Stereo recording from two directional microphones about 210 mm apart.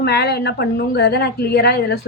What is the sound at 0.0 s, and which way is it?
A woman's voice, 50° left (ahead or behind).